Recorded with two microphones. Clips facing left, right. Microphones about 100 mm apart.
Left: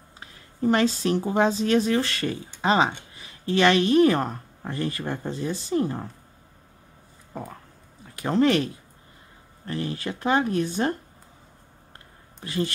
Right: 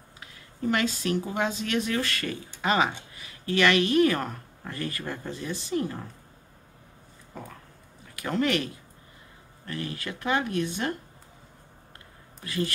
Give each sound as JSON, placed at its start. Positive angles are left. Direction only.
{"t": 0.2, "sound": "speech", "side_deg": 35}
{"t": 8.2, "sound": "speech", "side_deg": 30}
{"t": 9.7, "sound": "speech", "side_deg": 30}
{"t": 12.4, "sound": "speech", "side_deg": 30}